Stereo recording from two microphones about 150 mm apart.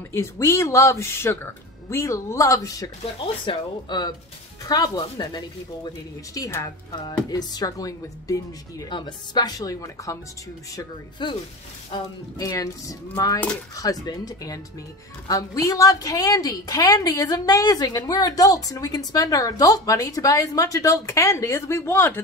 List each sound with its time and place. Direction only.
0.1 s a woman's voice: 20° left (ahead or behind)